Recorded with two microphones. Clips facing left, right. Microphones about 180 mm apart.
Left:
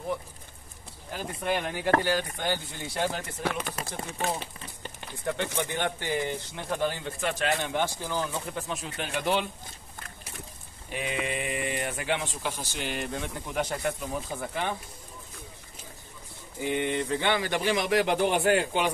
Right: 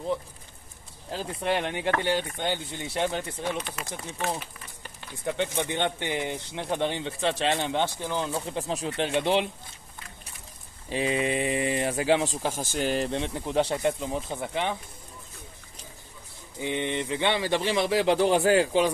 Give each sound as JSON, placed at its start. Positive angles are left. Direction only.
{"t": 1.1, "sound": "speech", "side_deg": -25}
{"t": 3.4, "sound": "speech", "side_deg": 55}
{"t": 4.4, "sound": "speech", "side_deg": 30}
{"t": 5.2, "sound": "speech", "side_deg": -20}
{"t": 10.9, "sound": "speech", "side_deg": -30}
{"t": 16.6, "sound": "speech", "side_deg": -20}